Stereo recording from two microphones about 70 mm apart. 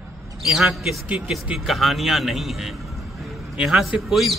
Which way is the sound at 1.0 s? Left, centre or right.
Centre.